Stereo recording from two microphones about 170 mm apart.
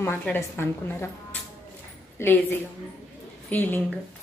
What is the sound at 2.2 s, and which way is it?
Speech, 15° left (ahead or behind).